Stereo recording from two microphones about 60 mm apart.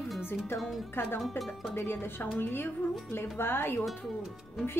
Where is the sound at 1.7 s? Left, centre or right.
Left.